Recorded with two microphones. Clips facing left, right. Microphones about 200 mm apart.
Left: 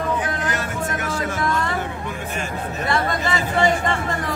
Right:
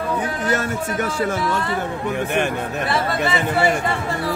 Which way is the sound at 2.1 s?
65° right (ahead or behind).